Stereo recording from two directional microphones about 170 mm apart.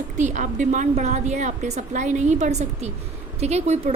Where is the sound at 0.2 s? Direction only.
45° right (ahead or behind).